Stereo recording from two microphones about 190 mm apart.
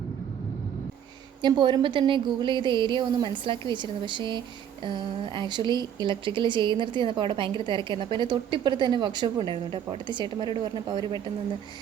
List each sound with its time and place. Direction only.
1.4 s speech: 25° right (ahead or behind)